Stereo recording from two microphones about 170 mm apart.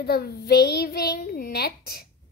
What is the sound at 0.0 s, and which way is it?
A child's voice, 70° left (ahead or behind).